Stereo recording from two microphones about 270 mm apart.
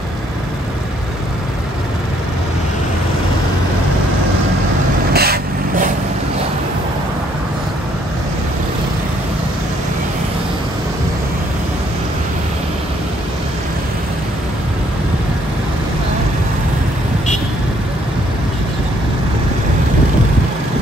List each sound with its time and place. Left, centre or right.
5.1 s vehicle: right